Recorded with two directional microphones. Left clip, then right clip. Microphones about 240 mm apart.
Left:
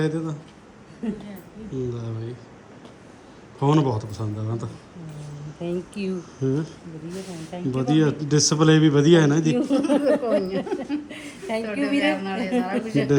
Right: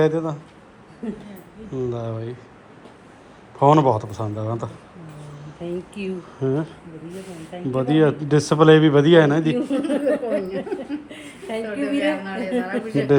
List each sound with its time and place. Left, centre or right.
0.0 s speech: centre
1.9 s speech: centre
3.6 s a woman's voice: centre